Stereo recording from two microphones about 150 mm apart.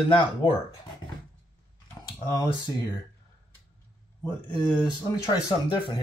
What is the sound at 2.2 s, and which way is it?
Speech, 20° left (ahead or behind).